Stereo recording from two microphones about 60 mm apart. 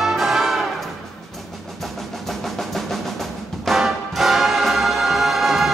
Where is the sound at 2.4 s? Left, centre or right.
Centre.